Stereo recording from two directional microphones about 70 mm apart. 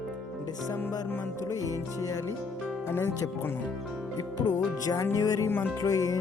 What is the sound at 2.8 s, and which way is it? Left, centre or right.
Music, left.